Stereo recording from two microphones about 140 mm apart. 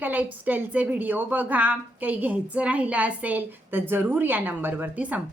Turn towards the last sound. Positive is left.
turn(degrees=-10)  # may be behind; listen again after turning